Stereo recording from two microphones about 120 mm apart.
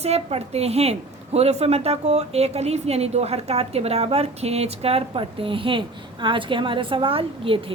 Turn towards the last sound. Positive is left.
turn(degrees=-50)  # may be behind; listen again after turning